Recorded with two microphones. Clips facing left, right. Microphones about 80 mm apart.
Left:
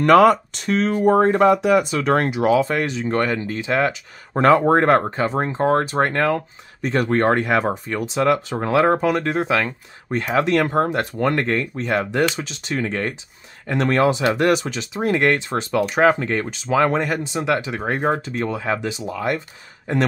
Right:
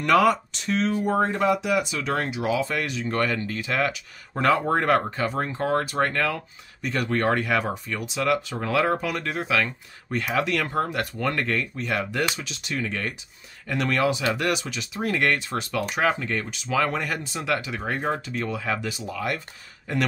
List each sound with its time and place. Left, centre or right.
0.0 s speech: left
2.0 s speech: left
2.7 s speech: left
4.3 s speech: left